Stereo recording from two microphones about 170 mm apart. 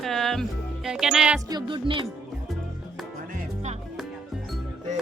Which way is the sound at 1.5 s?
30° right (ahead or behind).